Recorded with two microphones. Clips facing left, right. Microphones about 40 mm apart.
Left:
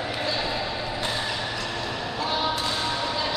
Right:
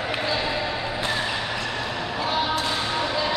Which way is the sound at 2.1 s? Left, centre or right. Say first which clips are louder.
Right 2 dB; centre.